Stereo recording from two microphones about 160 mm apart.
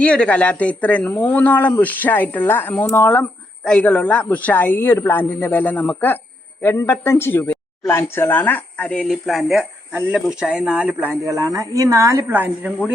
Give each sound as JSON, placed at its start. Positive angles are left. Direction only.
{"t": 0.0, "sound": "speech", "side_deg": 5}
{"t": 11.3, "sound": "speech", "side_deg": -20}